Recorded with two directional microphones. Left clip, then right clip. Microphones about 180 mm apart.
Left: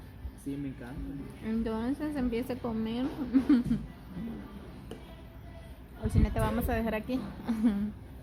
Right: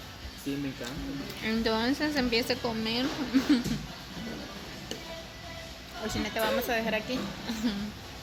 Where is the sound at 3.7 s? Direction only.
30° left (ahead or behind).